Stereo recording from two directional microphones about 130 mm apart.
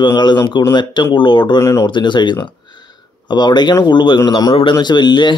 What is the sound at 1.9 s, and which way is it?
Speech, 35° left (ahead or behind).